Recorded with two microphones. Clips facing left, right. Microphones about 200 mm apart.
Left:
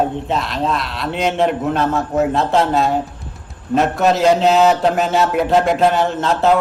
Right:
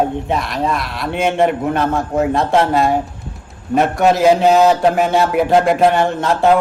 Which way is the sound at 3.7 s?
15° right (ahead or behind).